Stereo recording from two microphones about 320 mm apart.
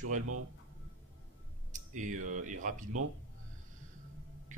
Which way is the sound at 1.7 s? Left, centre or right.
Right.